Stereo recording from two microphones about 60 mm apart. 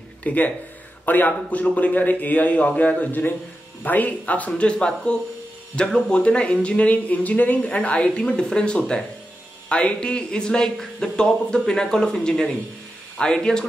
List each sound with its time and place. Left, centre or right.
0.2 s speech: left
4.5 s speech: centre